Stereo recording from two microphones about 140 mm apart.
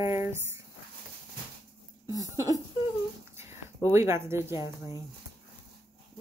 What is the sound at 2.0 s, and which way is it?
Speech, 25° right (ahead or behind).